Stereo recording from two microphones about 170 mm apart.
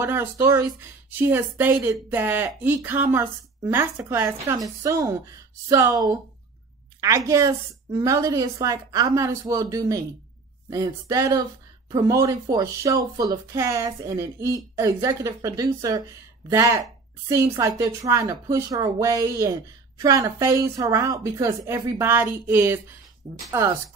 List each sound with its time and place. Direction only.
0.0 s a woman's voice: 15° right (ahead or behind)